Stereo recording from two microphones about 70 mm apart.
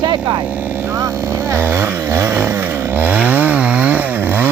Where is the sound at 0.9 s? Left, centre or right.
Right.